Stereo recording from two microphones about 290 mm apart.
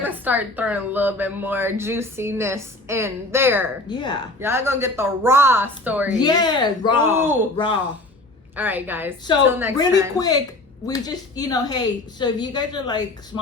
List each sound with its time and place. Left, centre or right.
0.0 s speech: centre
3.8 s a woman's voice: centre
4.4 s speech: centre
6.1 s a woman's voice: centre
7.1 s speech: centre
8.5 s speech: centre
10.2 s a woman's voice: centre